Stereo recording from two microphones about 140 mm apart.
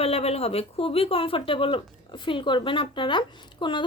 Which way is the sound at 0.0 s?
45° left (ahead or behind).